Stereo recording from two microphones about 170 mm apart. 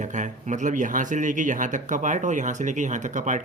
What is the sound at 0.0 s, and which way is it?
Speech, 45° right (ahead or behind).